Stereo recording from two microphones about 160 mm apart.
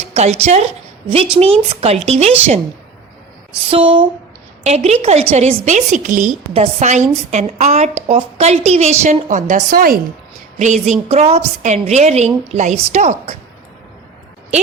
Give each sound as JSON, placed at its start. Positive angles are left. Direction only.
{"t": 0.1, "sound": "a woman's voice", "side_deg": -40}
{"t": 3.7, "sound": "a woman's voice", "side_deg": -35}
{"t": 6.5, "sound": "a woman's voice", "side_deg": -40}
{"t": 10.6, "sound": "a woman's voice", "side_deg": -50}